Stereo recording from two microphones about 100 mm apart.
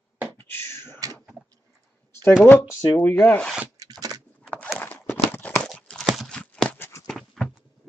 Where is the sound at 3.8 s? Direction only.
40° right (ahead or behind).